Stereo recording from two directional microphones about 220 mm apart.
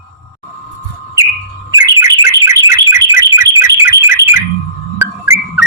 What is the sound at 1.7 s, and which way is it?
Bird, 15° right (ahead or behind).